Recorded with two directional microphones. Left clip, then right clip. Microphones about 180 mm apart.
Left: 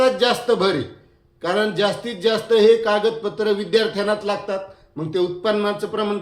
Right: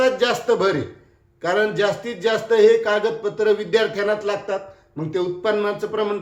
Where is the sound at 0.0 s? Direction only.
15° left (ahead or behind).